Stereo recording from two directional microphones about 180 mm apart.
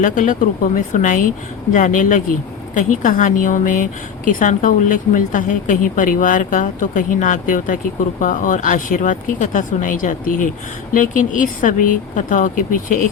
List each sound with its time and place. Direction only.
0.0 s a woman's voice: 45° left (ahead or behind)